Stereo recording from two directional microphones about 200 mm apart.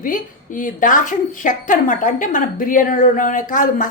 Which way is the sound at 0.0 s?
40° left (ahead or behind).